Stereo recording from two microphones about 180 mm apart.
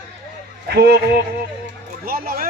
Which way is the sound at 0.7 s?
60° right (ahead or behind).